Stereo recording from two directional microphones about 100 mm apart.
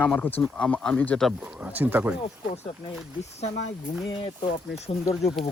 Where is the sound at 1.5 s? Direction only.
15° right (ahead or behind).